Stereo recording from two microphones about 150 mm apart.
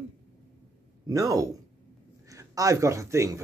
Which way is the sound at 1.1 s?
20° right (ahead or behind).